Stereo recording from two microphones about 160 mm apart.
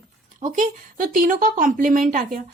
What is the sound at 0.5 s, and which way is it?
Speech, 55° right (ahead or behind).